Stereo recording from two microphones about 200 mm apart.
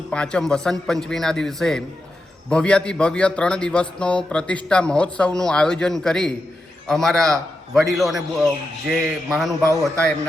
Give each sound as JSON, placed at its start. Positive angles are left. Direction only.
{"t": 0.1, "sound": "a man's voice", "side_deg": 5}